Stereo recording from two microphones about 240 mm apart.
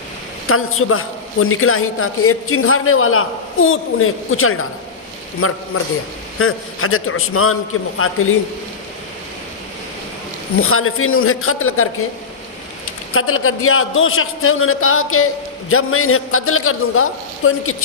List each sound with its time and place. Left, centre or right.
0.4 s a man's voice: left
10.6 s a man's voice: left
13.1 s a man's voice: left